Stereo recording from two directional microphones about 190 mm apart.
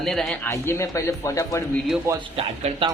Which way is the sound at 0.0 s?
Centre (ahead or behind).